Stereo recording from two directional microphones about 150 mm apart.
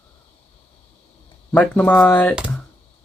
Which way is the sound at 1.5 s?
10° left (ahead or behind).